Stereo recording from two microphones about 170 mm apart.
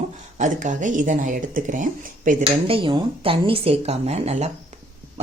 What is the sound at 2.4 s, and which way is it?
Speech, 30° right (ahead or behind).